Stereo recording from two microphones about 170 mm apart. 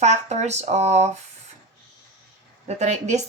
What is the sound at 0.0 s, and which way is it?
Speech, 45° right (ahead or behind).